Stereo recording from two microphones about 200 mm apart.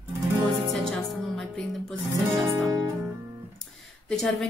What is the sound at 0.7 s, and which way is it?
Music, centre (ahead or behind).